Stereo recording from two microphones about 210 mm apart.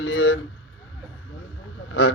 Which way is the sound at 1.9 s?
55° left (ahead or behind).